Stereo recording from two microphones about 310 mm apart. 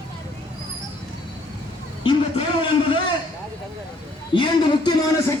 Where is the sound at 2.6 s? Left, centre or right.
Centre.